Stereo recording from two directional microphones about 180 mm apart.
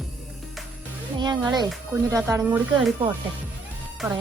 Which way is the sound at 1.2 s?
25° right (ahead or behind).